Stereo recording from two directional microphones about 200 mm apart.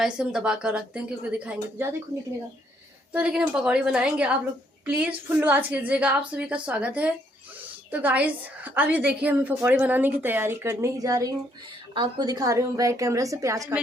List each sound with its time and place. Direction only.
0.0 s a woman's voice: 5° right (ahead or behind)
3.1 s a woman's voice: 5° right (ahead or behind)